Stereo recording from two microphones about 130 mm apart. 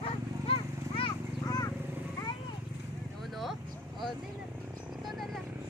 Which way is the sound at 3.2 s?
Centre (ahead or behind).